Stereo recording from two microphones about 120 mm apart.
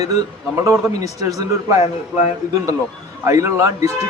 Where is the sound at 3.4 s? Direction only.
25° right (ahead or behind).